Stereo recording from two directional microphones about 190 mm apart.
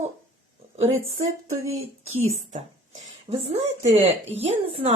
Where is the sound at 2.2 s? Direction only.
35° right (ahead or behind).